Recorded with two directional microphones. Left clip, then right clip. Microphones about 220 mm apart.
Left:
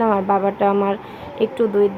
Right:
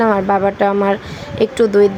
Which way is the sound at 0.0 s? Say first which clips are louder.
Right 4 dB; 30° right (ahead or behind).